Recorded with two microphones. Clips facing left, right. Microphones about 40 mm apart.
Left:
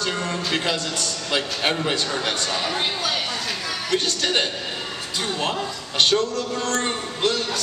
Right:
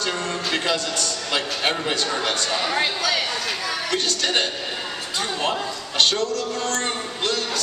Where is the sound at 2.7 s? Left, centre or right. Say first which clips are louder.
Right 2 dB; right.